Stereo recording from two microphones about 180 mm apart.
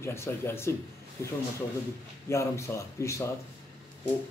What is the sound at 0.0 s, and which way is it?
Speech, 15° left (ahead or behind).